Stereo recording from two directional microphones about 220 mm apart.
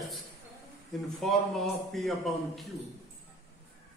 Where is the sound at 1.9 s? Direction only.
Centre (ahead or behind).